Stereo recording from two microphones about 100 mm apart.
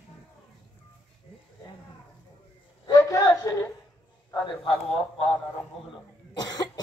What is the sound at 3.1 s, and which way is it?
Speech, 30° left (ahead or behind).